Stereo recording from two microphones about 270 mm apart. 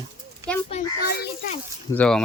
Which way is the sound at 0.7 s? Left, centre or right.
Left.